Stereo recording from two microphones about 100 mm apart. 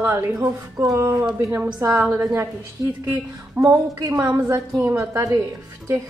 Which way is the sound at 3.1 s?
20° right (ahead or behind).